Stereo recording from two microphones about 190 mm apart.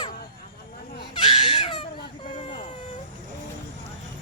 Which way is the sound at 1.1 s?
30° left (ahead or behind).